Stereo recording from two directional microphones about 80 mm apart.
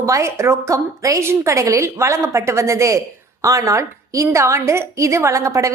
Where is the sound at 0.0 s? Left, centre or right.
Right.